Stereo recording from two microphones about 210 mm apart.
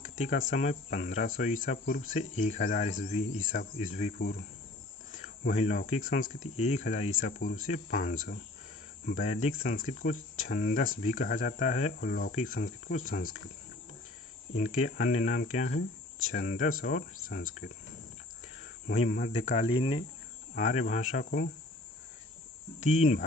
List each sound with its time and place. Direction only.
0.2 s speech: 40° left (ahead or behind)
14.5 s speech: 35° left (ahead or behind)
20.6 s speech: 40° left (ahead or behind)
22.8 s speech: 35° left (ahead or behind)